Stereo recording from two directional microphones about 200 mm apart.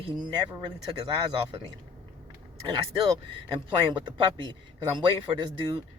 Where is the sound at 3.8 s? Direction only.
25° right (ahead or behind).